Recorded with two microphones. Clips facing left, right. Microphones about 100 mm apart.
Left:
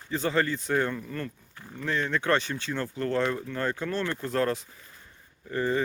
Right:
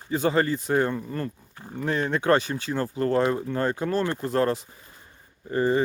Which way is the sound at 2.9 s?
35° right (ahead or behind).